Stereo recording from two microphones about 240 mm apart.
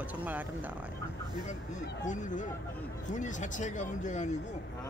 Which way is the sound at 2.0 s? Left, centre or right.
Left.